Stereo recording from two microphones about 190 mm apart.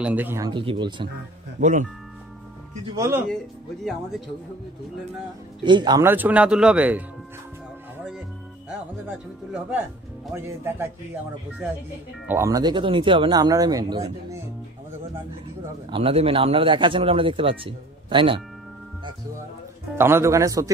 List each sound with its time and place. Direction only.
0.0 s speech: 10° right (ahead or behind)
0.5 s speech: 25° right (ahead or behind)
1.6 s speech: 40° right (ahead or behind)
2.9 s speech: 15° right (ahead or behind)
5.6 s speech: 25° right (ahead or behind)
6.0 s speech: 10° right (ahead or behind)
9.0 s speech: 10° right (ahead or behind)
12.3 s speech: 15° right (ahead or behind)
15.9 s speech: 30° right (ahead or behind)
20.0 s speech: 15° right (ahead or behind)